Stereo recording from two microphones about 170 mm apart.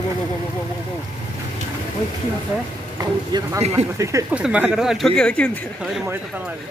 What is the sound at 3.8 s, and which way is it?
Speech, 40° right (ahead or behind).